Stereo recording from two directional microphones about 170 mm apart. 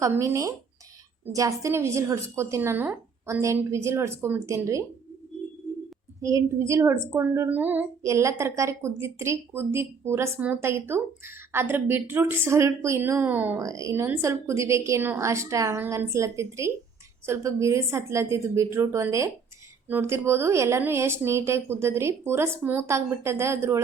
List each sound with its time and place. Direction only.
0.0 s a woman's voice: 15° right (ahead or behind)
6.2 s a woman's voice: 20° right (ahead or behind)